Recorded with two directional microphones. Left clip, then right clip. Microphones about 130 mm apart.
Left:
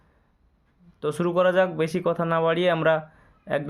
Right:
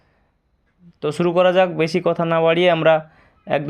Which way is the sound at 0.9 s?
20° right (ahead or behind).